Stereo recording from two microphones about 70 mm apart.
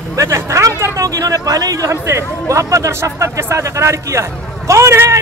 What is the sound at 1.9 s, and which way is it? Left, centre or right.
Speech, right.